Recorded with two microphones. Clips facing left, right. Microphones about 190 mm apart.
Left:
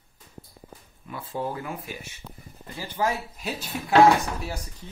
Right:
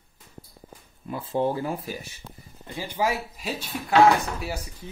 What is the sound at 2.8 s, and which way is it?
Speech, 10° right (ahead or behind).